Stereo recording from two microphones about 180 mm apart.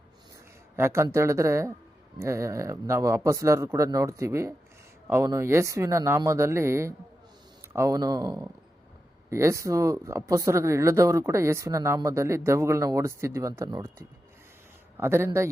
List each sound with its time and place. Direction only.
0.8 s speech: 15° right (ahead or behind)
14.9 s speech: 15° right (ahead or behind)